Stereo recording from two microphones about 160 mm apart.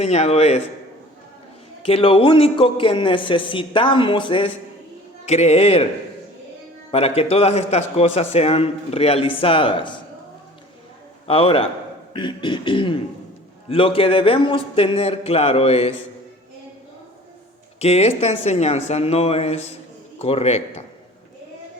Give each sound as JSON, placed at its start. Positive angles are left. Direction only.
{"t": 0.0, "sound": "a man's voice", "side_deg": 40}
{"t": 1.8, "sound": "a man's voice", "side_deg": 35}
{"t": 6.9, "sound": "a man's voice", "side_deg": 40}
{"t": 11.3, "sound": "a man's voice", "side_deg": 35}
{"t": 17.7, "sound": "a man's voice", "side_deg": 40}